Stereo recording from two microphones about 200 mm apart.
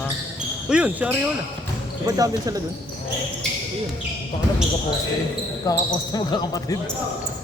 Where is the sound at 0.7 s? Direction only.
5° right (ahead or behind).